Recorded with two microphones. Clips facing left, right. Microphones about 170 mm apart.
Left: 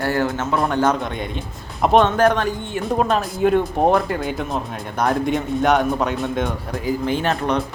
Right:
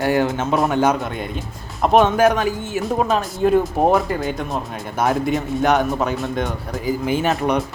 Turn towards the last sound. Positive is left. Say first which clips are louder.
# right 2 dB
turn(degrees=-10)  # may be behind; listen again after turning